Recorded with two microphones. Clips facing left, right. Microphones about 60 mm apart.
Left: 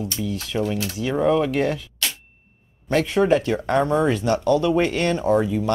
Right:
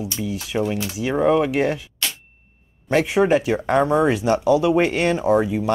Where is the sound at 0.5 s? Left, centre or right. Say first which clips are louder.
Right 2 dB; right.